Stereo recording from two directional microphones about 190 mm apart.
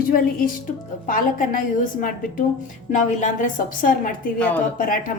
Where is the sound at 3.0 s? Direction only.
40° left (ahead or behind).